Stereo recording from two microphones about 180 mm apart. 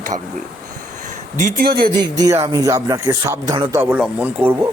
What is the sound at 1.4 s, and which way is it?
Speech, 50° right (ahead or behind).